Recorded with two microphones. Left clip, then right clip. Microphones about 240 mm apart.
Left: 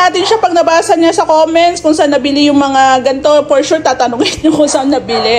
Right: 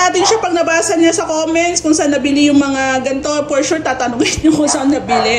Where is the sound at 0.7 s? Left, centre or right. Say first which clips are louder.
Left 4 dB; centre.